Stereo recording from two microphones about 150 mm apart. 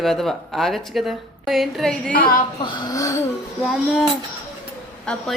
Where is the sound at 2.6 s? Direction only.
30° left (ahead or behind).